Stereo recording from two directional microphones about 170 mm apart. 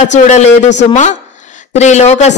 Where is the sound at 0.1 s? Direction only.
45° left (ahead or behind).